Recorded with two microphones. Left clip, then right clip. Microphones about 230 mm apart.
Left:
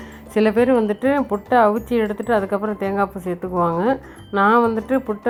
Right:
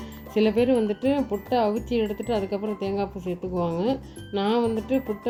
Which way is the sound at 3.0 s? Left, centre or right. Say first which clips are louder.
Left 7 dB; left.